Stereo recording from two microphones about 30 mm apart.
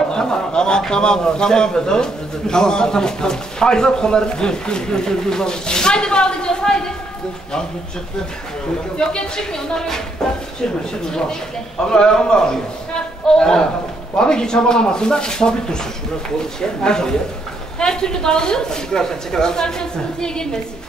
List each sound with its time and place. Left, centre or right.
0.1 s a man's voice: left
9.5 s speech: centre
11.9 s a man's voice: left
16.8 s a man's voice: left